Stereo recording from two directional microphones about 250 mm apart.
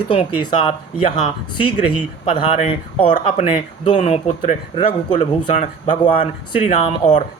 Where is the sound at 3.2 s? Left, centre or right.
Left.